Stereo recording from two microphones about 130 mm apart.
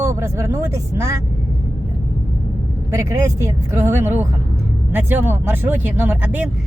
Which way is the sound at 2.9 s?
20° right (ahead or behind).